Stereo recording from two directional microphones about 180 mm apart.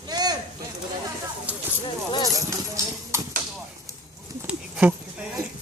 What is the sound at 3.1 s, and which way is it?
Horse, 15° right (ahead or behind).